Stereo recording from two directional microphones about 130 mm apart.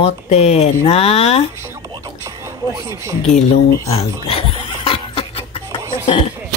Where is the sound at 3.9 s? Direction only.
45° left (ahead or behind).